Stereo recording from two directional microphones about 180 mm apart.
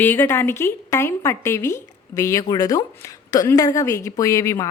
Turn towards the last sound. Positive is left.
turn(degrees=15)  # may be behind; listen again after turning